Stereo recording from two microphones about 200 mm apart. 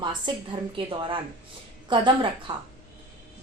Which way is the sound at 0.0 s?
25° right (ahead or behind).